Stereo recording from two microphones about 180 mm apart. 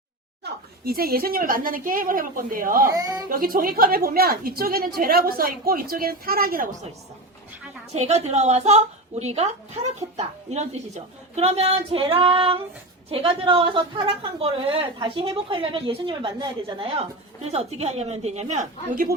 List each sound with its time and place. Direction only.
0.4 s a woman's voice: 55° right (ahead or behind)
2.9 s a woman's voice: 20° right (ahead or behind)
3.2 s a woman's voice: 50° right (ahead or behind)
7.9 s a woman's voice: 35° right (ahead or behind)